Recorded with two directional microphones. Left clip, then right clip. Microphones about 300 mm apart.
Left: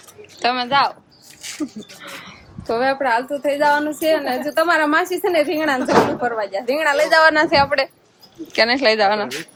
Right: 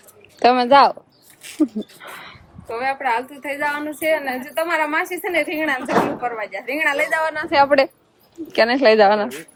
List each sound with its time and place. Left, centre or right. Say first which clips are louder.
0.3 s speech: right 5 dB; centre
2.6 s a woman's voice: left 3 dB; centre
7.1 s a woman's voice: left 8 dB; left
7.5 s speech: right 2 dB; centre